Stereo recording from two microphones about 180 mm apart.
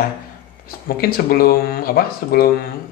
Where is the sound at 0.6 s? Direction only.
55° left (ahead or behind).